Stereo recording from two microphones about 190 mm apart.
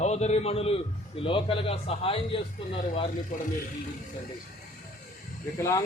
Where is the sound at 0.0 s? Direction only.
35° left (ahead or behind).